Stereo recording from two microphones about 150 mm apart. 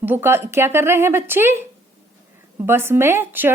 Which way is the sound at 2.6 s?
15° right (ahead or behind).